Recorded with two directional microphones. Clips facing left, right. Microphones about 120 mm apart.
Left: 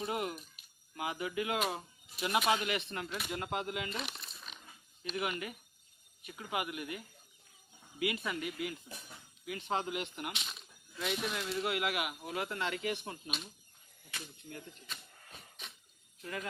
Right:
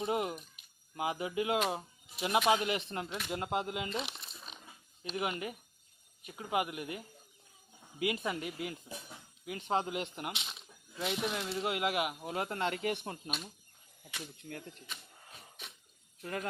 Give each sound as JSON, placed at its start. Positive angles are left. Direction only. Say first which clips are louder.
{"t": 0.0, "sound": "speech", "louder": "right 3 dB", "side_deg": -25}
{"t": 14.8, "sound": "a sound", "louder": "even", "side_deg": -10}
{"t": 16.2, "sound": "speech", "louder": "right 3 dB", "side_deg": -40}